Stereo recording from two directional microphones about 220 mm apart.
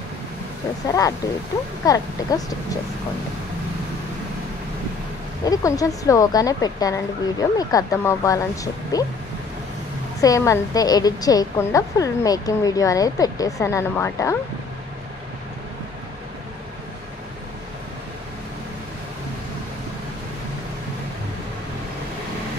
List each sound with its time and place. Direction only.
0.8 s a woman's voice: 15° left (ahead or behind)
5.4 s a woman's voice: 15° left (ahead or behind)
10.2 s a woman's voice: 15° left (ahead or behind)